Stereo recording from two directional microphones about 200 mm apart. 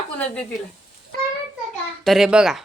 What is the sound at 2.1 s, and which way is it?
Speech, centre (ahead or behind).